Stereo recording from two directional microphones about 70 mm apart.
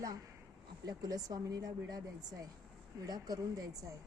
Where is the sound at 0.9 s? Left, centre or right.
Right.